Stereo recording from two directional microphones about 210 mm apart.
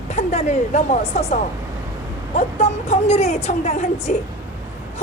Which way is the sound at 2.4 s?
30° left (ahead or behind).